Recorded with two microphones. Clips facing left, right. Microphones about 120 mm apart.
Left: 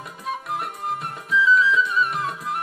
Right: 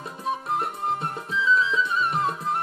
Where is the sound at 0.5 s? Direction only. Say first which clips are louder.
Right 2 dB; 25° right (ahead or behind).